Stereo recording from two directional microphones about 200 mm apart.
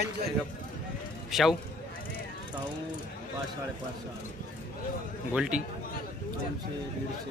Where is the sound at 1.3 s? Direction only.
Centre (ahead or behind).